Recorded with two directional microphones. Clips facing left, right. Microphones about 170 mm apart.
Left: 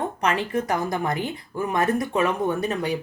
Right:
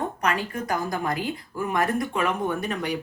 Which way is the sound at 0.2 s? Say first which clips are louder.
Left 6 dB; 25° left (ahead or behind).